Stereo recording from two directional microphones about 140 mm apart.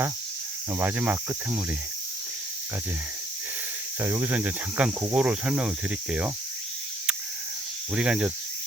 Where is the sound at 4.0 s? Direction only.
15° right (ahead or behind).